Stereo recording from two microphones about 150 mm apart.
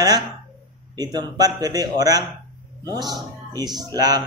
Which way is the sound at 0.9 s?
25° right (ahead or behind).